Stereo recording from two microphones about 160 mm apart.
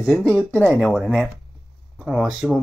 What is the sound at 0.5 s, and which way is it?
Speech, 5° left (ahead or behind).